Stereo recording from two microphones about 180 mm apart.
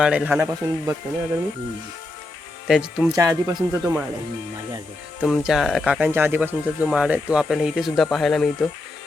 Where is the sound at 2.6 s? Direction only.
5° right (ahead or behind).